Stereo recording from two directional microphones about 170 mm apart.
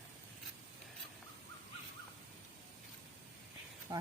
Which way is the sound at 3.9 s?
25° right (ahead or behind).